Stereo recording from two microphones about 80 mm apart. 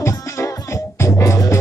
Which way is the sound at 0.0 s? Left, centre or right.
Left.